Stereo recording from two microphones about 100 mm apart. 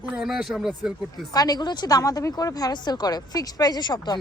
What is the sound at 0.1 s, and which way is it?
Speech, 5° right (ahead or behind).